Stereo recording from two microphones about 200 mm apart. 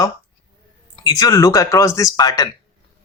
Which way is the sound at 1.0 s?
15° left (ahead or behind).